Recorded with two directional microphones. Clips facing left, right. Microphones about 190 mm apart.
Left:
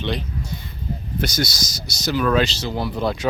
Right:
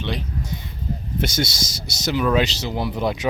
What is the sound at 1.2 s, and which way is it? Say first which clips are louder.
Speech: even; 25° right (ahead or behind).